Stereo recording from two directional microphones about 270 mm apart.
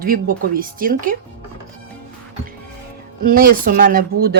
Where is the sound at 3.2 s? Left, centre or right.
Right.